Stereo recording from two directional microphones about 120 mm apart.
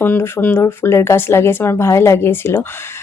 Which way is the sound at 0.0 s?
15° left (ahead or behind).